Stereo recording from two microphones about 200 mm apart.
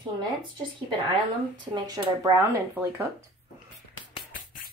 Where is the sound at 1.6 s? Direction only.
20° right (ahead or behind).